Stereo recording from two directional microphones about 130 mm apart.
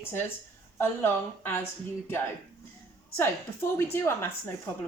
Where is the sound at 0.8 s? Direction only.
15° left (ahead or behind).